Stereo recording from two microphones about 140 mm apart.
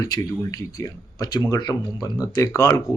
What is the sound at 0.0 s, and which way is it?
Speech, 25° left (ahead or behind).